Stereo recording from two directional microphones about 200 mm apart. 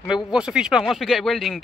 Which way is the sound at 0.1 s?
5° right (ahead or behind).